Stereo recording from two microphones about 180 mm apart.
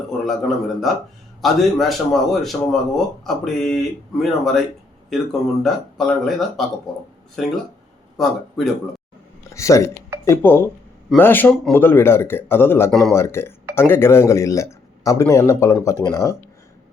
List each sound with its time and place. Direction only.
0.3 s speech: centre (ahead or behind)
9.6 s speech: 15° left (ahead or behind)
12.9 s speech: centre (ahead or behind)
13.1 s speech: 15° left (ahead or behind)